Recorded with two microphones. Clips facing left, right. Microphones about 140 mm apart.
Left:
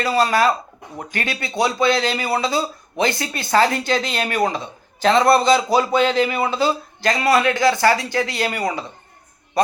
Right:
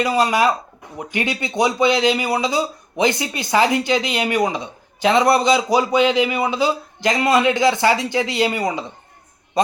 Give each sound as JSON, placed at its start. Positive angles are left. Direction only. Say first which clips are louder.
{"t": 0.0, "sound": "a man's voice", "louder": "even", "side_deg": -15}